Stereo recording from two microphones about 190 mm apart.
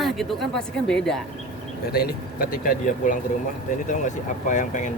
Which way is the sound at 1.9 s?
50° left (ahead or behind).